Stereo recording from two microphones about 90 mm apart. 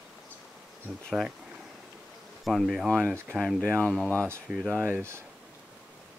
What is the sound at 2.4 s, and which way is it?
Speech, centre (ahead or behind).